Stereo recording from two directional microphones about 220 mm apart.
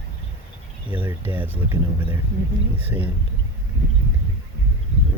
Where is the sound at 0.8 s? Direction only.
10° right (ahead or behind).